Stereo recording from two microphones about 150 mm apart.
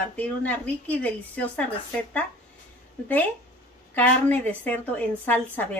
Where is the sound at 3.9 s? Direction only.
10° left (ahead or behind).